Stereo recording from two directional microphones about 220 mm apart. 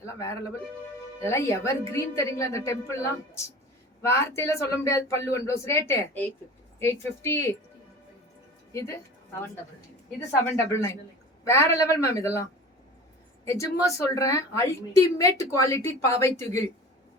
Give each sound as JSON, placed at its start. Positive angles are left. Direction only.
{"t": 0.0, "sound": "a woman's voice", "side_deg": 15}
{"t": 8.7, "sound": "a woman's voice", "side_deg": 15}
{"t": 10.4, "sound": "a woman's voice", "side_deg": 15}